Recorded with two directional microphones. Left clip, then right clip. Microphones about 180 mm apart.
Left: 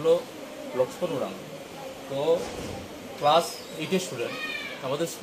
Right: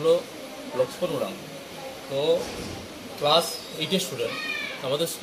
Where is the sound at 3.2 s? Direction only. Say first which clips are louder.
Even; centre (ahead or behind).